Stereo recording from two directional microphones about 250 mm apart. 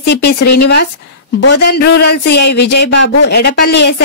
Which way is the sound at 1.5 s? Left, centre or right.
Left.